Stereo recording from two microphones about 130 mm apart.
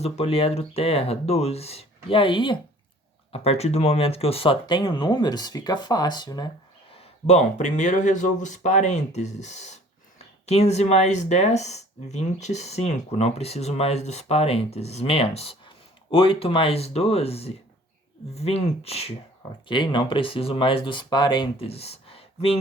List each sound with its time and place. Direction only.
0.0 s speech: 50° left (ahead or behind)
3.3 s speech: 50° left (ahead or behind); by 6.5 s 30° left (ahead or behind)
7.0 s speech: 60° left (ahead or behind)
19.6 s speech: 40° left (ahead or behind)
21.7 s a sound: 50° left (ahead or behind)